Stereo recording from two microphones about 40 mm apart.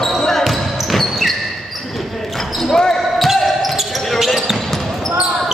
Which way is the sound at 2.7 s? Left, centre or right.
Centre.